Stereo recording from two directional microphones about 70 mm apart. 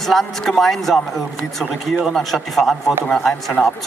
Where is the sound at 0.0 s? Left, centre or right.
Centre.